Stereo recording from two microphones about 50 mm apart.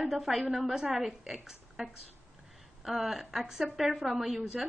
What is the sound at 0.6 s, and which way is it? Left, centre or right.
A woman's voice, centre.